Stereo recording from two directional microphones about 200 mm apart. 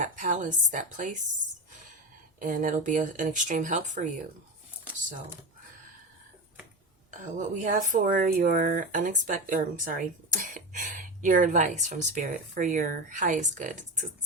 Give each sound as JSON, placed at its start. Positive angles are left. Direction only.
{"t": 0.0, "sound": "speech", "side_deg": -40}
{"t": 2.4, "sound": "speech", "side_deg": -40}
{"t": 7.1, "sound": "speech", "side_deg": -40}